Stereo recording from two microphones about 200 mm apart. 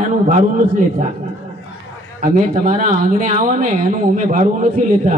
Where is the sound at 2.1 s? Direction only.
40° right (ahead or behind).